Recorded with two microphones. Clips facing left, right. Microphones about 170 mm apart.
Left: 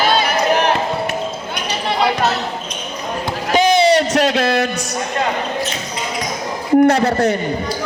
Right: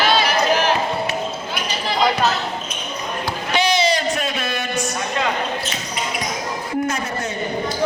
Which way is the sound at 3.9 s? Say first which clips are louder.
Left 8 dB; 80° left.